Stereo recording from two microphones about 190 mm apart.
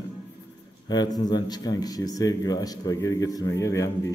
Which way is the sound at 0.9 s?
20° left (ahead or behind).